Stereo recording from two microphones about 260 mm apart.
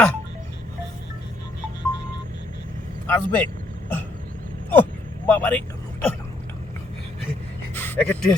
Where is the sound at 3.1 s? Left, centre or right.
Centre.